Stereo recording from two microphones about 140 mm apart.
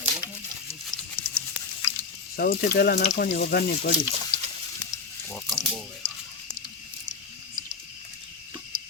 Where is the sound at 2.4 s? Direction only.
90° left.